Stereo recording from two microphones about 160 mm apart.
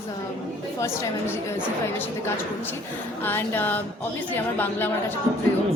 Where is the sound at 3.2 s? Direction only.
10° left (ahead or behind).